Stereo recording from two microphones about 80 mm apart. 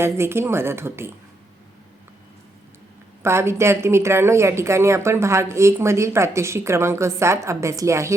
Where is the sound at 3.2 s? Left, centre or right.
Right.